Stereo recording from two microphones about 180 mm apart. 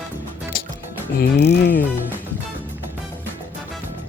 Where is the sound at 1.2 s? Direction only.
70° left (ahead or behind).